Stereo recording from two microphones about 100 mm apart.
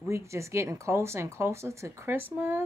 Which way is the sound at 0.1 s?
30° right (ahead or behind).